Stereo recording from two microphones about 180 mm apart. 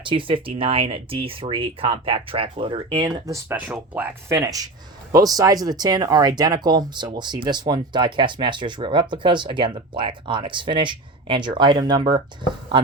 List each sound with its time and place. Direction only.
0.0 s speech: 30° right (ahead or behind)
3.7 s speech: 5° right (ahead or behind); by 12.8 s 25° right (ahead or behind)